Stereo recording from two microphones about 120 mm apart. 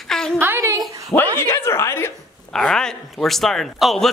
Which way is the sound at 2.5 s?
5° left (ahead or behind).